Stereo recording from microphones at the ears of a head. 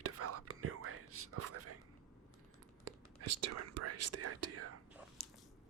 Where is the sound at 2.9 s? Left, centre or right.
Right.